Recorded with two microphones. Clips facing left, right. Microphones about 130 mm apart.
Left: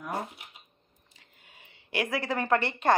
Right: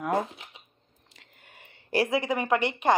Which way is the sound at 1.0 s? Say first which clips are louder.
Right 4 dB; 70° right (ahead or behind).